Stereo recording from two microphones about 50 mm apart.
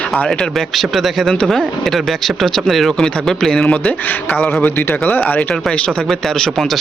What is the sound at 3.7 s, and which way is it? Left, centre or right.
Speech, left.